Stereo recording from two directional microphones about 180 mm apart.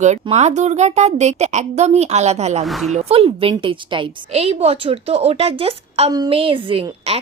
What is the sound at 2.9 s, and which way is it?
A woman's voice, 35° right (ahead or behind).